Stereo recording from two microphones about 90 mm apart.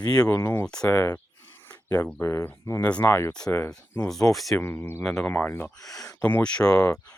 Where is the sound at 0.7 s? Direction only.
15° left (ahead or behind).